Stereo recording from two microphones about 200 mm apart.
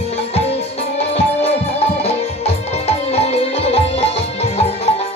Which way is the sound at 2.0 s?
30° left (ahead or behind).